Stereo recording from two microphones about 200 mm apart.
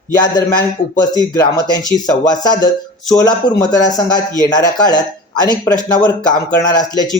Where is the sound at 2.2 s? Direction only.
20° left (ahead or behind).